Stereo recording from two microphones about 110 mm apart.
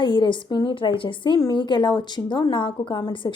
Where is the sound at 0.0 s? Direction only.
45° left (ahead or behind).